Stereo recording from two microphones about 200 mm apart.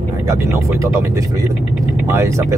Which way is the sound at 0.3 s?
15° right (ahead or behind).